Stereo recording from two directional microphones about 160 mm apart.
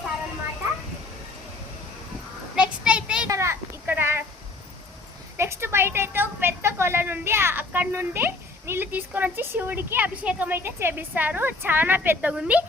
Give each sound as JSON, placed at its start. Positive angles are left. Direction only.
{"t": 2.6, "sound": "child singing", "side_deg": -5}
{"t": 3.2, "sound": "a sound", "side_deg": -20}
{"t": 5.4, "sound": "a woman's voice", "side_deg": -15}